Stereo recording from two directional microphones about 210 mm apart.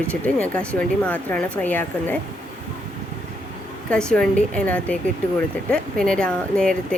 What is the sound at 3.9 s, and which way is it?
Speech, 5° left (ahead or behind).